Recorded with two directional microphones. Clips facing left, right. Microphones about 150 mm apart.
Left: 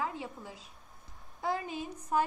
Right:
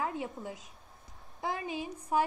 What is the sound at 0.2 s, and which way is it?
A woman's voice, 20° right (ahead or behind).